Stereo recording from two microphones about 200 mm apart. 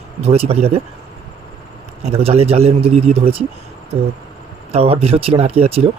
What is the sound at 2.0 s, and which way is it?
Speech, 30° right (ahead or behind).